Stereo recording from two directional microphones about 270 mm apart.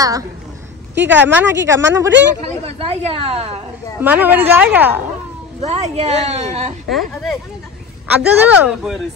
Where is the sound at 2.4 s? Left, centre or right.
Right.